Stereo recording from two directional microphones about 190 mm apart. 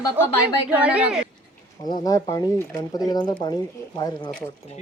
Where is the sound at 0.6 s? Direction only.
5° right (ahead or behind).